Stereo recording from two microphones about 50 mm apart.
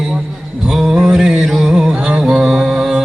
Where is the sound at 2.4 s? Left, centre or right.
Centre.